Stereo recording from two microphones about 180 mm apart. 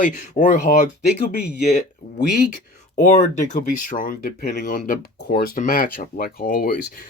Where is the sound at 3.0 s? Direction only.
45° left (ahead or behind).